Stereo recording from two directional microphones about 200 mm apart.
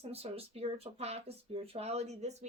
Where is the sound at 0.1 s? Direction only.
30° right (ahead or behind).